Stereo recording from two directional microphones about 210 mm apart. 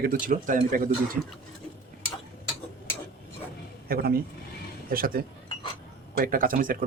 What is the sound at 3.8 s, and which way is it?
Speech, 45° right (ahead or behind).